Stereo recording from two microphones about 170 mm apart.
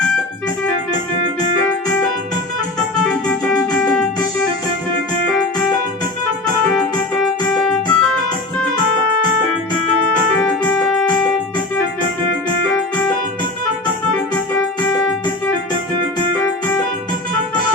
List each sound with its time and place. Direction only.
3.1 s keyboard: 5° left (ahead or behind)
3.8 s music: 5° left (ahead or behind)
7.2 s music: 5° left (ahead or behind)
10.4 s keyboard: 5° left (ahead or behind)
12.7 s music: 10° left (ahead or behind)